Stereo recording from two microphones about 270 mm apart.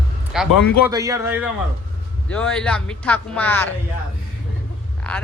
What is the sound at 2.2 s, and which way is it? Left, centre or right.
Speech, centre.